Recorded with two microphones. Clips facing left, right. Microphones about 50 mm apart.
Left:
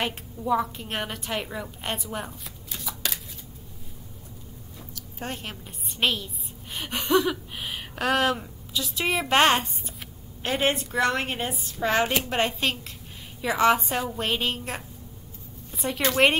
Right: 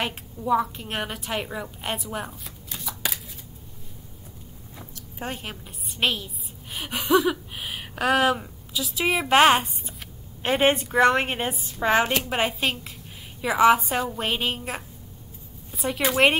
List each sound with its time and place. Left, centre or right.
0.0 s a woman's voice: centre
5.2 s a woman's voice: centre
10.4 s a woman's voice: right
12.0 s a woman's voice: centre